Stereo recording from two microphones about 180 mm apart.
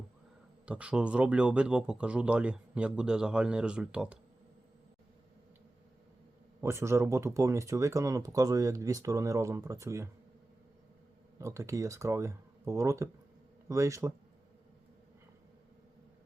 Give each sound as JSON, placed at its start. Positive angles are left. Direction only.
{"t": 0.6, "sound": "speech", "side_deg": -5}
{"t": 6.6, "sound": "speech", "side_deg": -15}
{"t": 11.3, "sound": "speech", "side_deg": -15}